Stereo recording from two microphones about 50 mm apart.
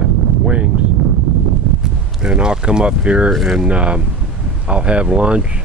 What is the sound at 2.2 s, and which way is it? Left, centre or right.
Speech, centre.